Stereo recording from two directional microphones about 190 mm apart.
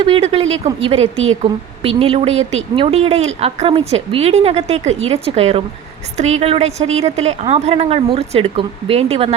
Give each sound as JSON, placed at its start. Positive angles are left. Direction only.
{"t": 0.0, "sound": "a woman's voice", "side_deg": -30}
{"t": 1.1, "sound": "a woman's voice", "side_deg": -90}
{"t": 2.0, "sound": "a woman's voice", "side_deg": -30}